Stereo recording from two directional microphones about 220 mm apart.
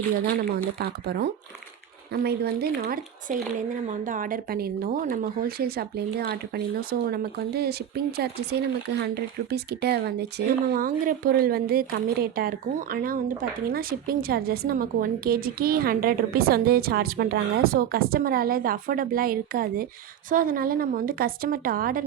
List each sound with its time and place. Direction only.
0.5 s a woman's voice: 45° right (ahead or behind)